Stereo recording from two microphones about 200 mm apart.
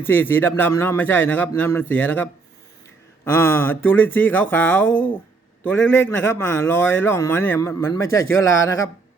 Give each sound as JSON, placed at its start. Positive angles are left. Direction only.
{"t": 0.0, "sound": "a man's voice", "side_deg": 10}
{"t": 8.2, "sound": "speech", "side_deg": 80}